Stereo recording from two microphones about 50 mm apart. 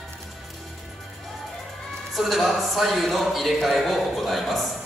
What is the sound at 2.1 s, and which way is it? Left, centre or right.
Speech, centre.